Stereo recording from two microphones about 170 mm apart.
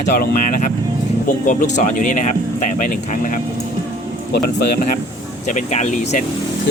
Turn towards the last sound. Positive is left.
turn(degrees=45)  # may be behind; listen again after turning